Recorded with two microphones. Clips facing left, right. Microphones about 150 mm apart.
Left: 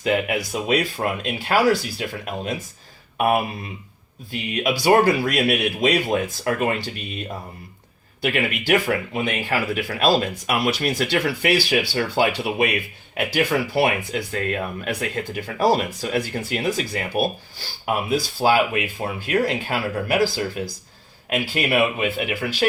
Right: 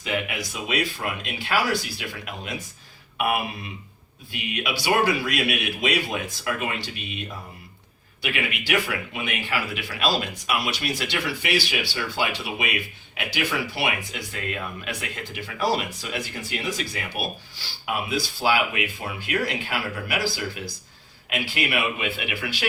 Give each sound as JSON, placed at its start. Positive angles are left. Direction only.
{"t": 0.0, "sound": "speech", "side_deg": 50}
{"t": 4.6, "sound": "speech", "side_deg": 45}
{"t": 8.2, "sound": "speech", "side_deg": 45}
{"t": 16.3, "sound": "speech", "side_deg": 50}
{"t": 17.8, "sound": "speech", "side_deg": 40}
{"t": 21.2, "sound": "speech", "side_deg": 40}